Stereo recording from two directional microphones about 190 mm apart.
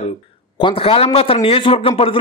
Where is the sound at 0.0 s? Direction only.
30° left (ahead or behind).